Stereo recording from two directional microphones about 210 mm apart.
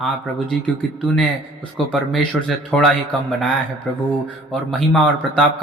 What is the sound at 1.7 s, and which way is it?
Speech, centre (ahead or behind).